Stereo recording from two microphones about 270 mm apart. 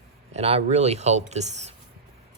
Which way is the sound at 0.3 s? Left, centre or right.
Right.